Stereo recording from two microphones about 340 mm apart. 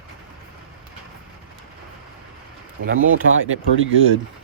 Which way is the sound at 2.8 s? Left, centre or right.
Right.